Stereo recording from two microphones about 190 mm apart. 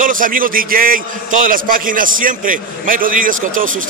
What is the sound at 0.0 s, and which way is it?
A man's voice, 45° right (ahead or behind).